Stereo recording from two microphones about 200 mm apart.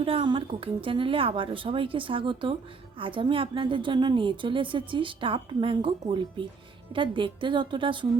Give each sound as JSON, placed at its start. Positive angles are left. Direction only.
{"t": 0.0, "sound": "a woman's voice", "side_deg": -25}